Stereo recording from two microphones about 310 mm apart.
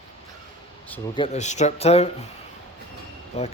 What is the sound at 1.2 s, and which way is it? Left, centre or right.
Speech, left.